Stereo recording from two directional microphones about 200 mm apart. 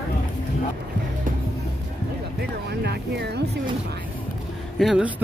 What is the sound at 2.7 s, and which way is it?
Music, 55° right (ahead or behind).